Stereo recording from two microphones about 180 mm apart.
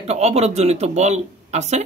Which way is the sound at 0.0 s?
35° right (ahead or behind).